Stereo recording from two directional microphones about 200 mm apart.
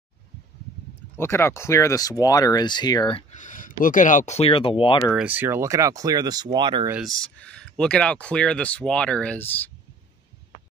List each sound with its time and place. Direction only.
1.1 s speech: 10° left (ahead or behind)
3.3 s speech: 40° left (ahead or behind); by 5.1 s 25° left (ahead or behind)
5.1 s speech: 10° right (ahead or behind)
6.9 s speech: centre (ahead or behind)